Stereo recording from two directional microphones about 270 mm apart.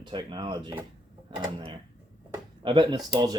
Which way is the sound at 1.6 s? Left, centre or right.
Centre.